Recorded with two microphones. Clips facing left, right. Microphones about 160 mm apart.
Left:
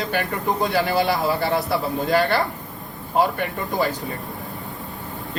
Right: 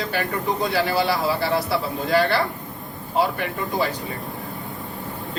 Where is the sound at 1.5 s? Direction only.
50° left (ahead or behind).